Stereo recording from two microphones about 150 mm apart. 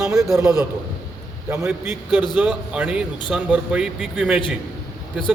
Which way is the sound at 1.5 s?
15° right (ahead or behind).